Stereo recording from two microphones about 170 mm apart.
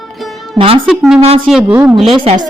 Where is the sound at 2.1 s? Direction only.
30° right (ahead or behind).